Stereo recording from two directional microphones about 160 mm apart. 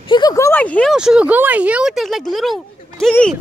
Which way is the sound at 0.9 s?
5° right (ahead or behind).